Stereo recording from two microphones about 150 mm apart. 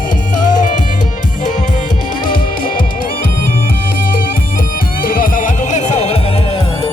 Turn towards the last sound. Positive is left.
turn(degrees=45)  # may be behind; listen again after turning